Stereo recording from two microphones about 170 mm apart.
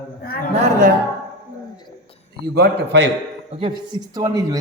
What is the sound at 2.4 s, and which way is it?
Speech, 70° right (ahead or behind).